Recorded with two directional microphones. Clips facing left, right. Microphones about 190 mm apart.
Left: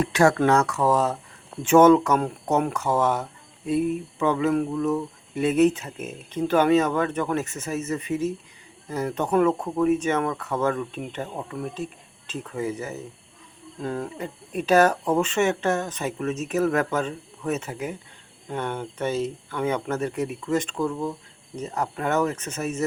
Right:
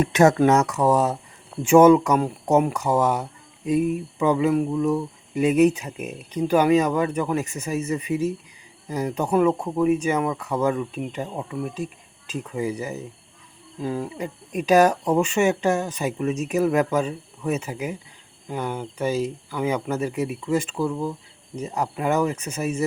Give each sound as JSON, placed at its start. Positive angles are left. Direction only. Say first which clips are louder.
{"t": 0.0, "sound": "speech", "louder": "right 3 dB", "side_deg": -20}